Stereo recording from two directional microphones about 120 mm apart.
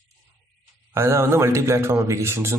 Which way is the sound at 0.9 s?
20° right (ahead or behind).